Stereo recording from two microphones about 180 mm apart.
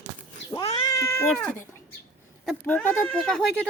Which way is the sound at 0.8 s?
15° left (ahead or behind).